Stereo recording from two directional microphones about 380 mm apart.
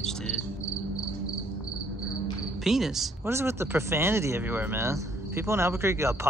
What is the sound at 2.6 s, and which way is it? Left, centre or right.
Speech, centre.